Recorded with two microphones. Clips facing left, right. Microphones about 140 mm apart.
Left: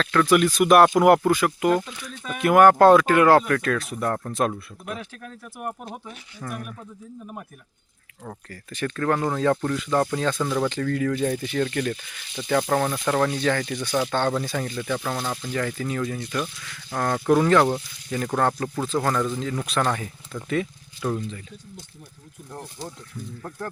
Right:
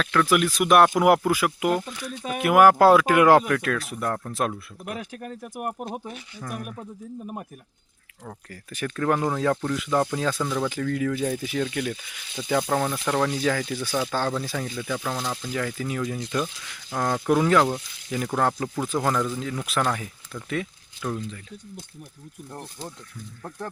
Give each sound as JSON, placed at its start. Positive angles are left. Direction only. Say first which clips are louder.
{"t": 0.0, "sound": "speech", "louder": "left 3 dB", "side_deg": -5}
{"t": 6.4, "sound": "speech", "louder": "left 1 dB", "side_deg": -5}
{"t": 8.4, "sound": "speech", "louder": "left 2 dB", "side_deg": -10}
{"t": 16.3, "sound": "speech", "louder": "right 1 dB", "side_deg": -20}
{"t": 16.9, "sound": "speech", "louder": "left 2 dB", "side_deg": -5}
{"t": 23.4, "sound": "speech", "louder": "even", "side_deg": 0}